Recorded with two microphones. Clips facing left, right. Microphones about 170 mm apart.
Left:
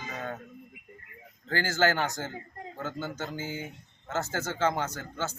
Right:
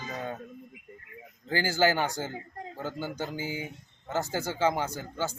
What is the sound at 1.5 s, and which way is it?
A man's voice, 15° right (ahead or behind).